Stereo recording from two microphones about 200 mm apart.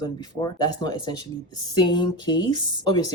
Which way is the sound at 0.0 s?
20° left (ahead or behind).